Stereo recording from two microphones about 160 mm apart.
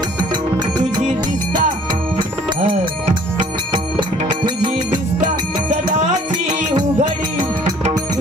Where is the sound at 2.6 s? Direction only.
60° right (ahead or behind).